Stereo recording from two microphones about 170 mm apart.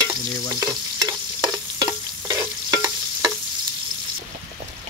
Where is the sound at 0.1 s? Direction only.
25° right (ahead or behind).